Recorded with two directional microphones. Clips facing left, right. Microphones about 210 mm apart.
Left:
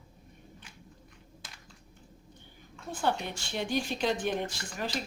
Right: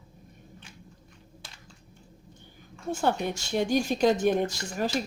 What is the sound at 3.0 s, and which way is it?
Speech, 45° right (ahead or behind).